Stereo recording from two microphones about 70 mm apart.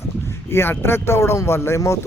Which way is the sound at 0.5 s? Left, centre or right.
Left.